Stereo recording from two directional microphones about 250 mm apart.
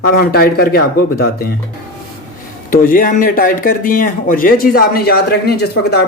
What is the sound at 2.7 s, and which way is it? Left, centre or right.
Speech, left.